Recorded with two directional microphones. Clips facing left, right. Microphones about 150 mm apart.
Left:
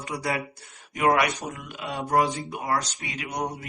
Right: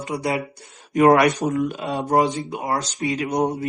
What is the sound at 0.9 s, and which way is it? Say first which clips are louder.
Speech: right 8 dB; 45° right (ahead or behind).